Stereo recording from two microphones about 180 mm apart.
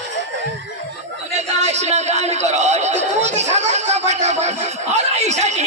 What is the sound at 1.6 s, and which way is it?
Chatter, 40° right (ahead or behind).